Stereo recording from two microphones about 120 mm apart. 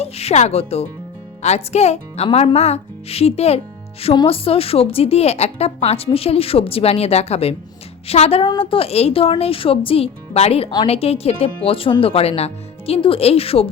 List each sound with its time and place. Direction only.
0.0 s speech: 60° left (ahead or behind)